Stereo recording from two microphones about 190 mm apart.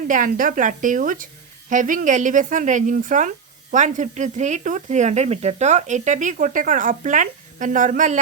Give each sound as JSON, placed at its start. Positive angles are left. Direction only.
{"t": 0.1, "sound": "a woman's voice", "side_deg": -45}